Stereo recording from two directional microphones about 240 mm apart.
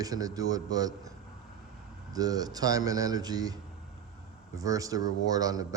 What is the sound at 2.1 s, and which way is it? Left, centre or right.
Speech, centre.